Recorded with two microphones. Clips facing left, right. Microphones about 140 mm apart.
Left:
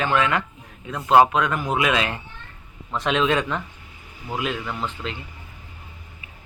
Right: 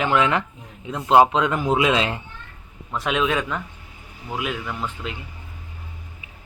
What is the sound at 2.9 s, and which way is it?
A man's voice, 5° right (ahead or behind).